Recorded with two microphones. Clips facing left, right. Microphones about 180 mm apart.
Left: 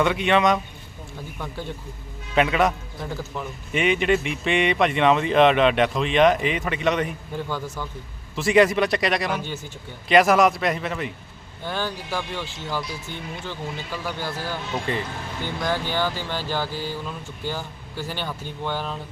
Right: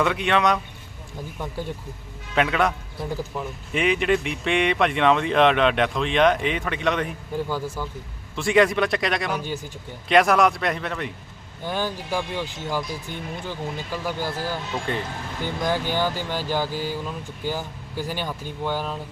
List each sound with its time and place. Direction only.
0.0 s a man's voice: centre (ahead or behind)
1.4 s speech: 10° right (ahead or behind)
2.3 s a man's voice: centre (ahead or behind)
8.4 s a man's voice: centre (ahead or behind)
11.6 s speech: 15° right (ahead or behind)
12.8 s speech: 50° right (ahead or behind)
13.9 s speech: 10° right (ahead or behind)
14.9 s a man's voice: centre (ahead or behind)
15.6 s speech: 15° right (ahead or behind)